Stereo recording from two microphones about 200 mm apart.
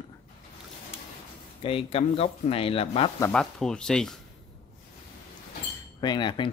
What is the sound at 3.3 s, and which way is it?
Speech, 5° left (ahead or behind).